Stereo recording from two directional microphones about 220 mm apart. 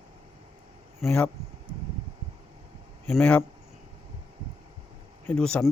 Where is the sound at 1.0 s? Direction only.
5° left (ahead or behind).